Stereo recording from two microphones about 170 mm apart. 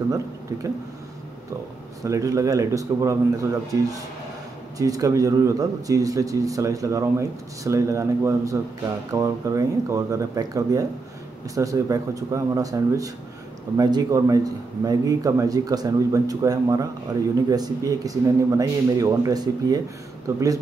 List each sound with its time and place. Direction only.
2.0 s a man's voice: 20° right (ahead or behind)
4.7 s a man's voice: 20° right (ahead or behind)